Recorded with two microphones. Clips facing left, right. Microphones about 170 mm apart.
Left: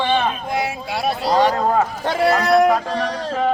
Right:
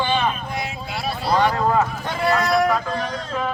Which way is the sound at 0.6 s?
75° left (ahead or behind).